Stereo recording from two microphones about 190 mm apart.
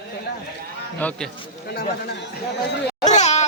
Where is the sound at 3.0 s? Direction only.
35° left (ahead or behind).